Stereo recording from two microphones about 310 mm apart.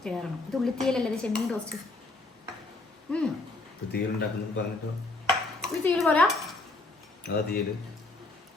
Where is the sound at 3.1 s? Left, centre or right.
Centre.